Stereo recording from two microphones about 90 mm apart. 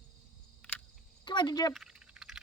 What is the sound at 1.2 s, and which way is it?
Speech, 60° left (ahead or behind).